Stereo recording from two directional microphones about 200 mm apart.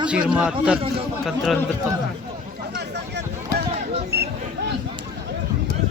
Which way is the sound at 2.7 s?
60° right (ahead or behind).